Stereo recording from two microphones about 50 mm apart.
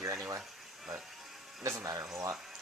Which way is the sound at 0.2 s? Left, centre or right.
Right.